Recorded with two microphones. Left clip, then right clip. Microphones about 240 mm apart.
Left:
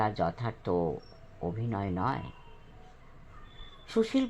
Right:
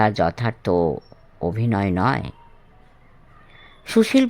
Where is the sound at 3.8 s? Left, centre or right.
Right.